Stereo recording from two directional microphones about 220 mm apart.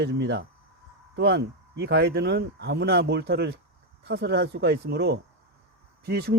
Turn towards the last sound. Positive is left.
turn(degrees=-50)  # may be behind; listen again after turning